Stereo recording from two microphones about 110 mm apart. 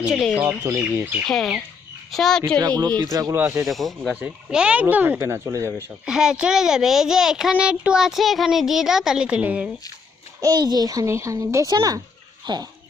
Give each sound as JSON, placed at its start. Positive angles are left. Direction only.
{"t": 0.0, "sound": "a child's voice", "side_deg": 0}
{"t": 0.7, "sound": "speech", "side_deg": -20}
{"t": 1.3, "sound": "a child's voice", "side_deg": 0}
{"t": 2.6, "sound": "a child's voice", "side_deg": -35}
{"t": 3.3, "sound": "speech", "side_deg": -25}
{"t": 3.7, "sound": "a child's voice", "side_deg": 0}
{"t": 6.1, "sound": "a child's voice", "side_deg": -5}
{"t": 10.4, "sound": "a child's voice", "side_deg": -40}
{"t": 12.5, "sound": "speech", "side_deg": -45}